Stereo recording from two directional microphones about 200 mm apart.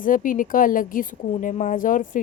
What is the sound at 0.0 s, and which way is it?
A woman's voice, 45° left (ahead or behind).